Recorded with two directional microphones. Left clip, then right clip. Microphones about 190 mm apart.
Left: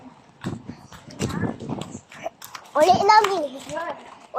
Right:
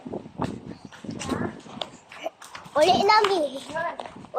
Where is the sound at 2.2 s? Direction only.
10° left (ahead or behind).